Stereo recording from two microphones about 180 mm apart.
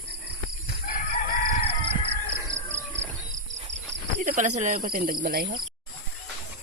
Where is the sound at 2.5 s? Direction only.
90° right.